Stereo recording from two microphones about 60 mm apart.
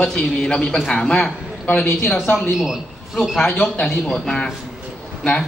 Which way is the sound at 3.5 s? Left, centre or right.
Left.